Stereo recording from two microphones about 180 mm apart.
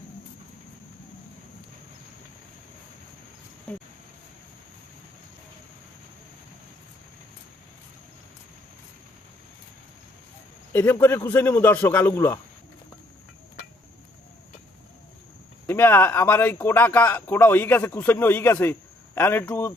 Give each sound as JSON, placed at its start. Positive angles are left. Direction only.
{"t": 3.7, "sound": "a sound", "side_deg": 5}
{"t": 10.7, "sound": "speech", "side_deg": 10}
{"t": 15.6, "sound": "speech", "side_deg": 10}